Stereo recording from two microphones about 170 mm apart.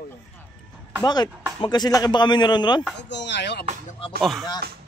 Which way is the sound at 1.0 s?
25° left (ahead or behind).